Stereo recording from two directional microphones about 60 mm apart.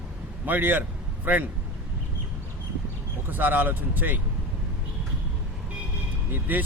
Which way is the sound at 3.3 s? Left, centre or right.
Right.